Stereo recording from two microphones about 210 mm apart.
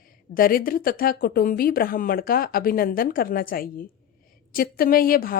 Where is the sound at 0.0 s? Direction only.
45° left (ahead or behind).